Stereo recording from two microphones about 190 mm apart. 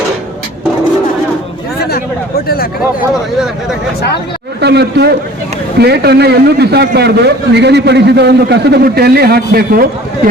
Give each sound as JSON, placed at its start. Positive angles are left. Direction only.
{"t": 4.6, "sound": "a man's voice", "side_deg": -60}